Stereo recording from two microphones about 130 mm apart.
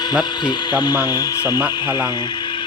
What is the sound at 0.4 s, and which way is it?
Speech, 30° left (ahead or behind).